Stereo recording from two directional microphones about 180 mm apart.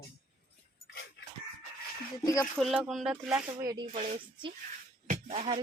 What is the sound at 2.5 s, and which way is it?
Speech, centre (ahead or behind).